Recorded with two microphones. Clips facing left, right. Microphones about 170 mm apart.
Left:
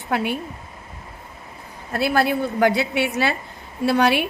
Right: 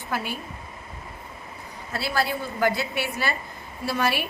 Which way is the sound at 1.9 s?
55° left (ahead or behind).